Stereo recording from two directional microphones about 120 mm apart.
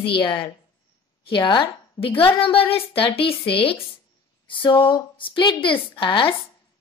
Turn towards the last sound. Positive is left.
turn(degrees=45)  # may be behind; listen again after turning